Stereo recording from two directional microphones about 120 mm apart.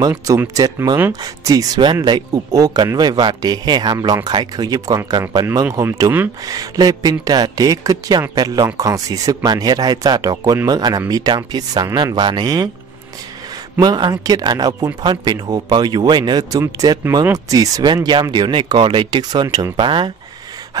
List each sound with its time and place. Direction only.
0.3 s speech: 30° right (ahead or behind)
13.7 s speech: 35° right (ahead or behind)